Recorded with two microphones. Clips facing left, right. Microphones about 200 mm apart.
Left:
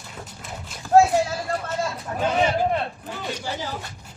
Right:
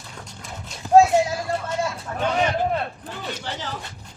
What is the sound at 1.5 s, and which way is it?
Vehicle, 25° right (ahead or behind).